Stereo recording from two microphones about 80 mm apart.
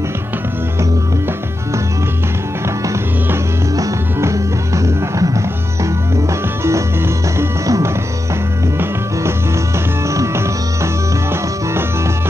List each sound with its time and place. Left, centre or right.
3.7 s music: right
10.0 s music: right